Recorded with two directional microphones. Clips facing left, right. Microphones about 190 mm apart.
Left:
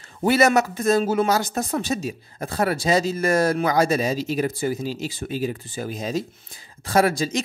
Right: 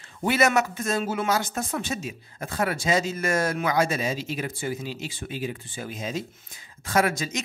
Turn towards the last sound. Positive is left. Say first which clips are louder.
# left 4 dB
turn(degrees=35)  # may be behind; listen again after turning